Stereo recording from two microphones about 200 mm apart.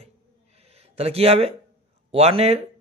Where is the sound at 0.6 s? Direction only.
30° right (ahead or behind).